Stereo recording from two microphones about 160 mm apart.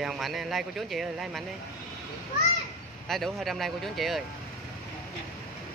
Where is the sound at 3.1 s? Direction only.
Centre (ahead or behind).